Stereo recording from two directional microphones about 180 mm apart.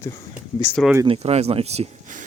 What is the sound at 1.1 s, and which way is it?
Speech, 35° right (ahead or behind).